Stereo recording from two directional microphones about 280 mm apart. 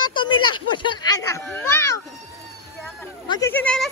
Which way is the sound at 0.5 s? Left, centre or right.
Centre.